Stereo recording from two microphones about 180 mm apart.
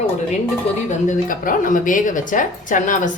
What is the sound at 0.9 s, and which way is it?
Speech, 45° left (ahead or behind).